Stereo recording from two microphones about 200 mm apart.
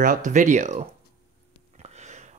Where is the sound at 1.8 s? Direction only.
35° right (ahead or behind).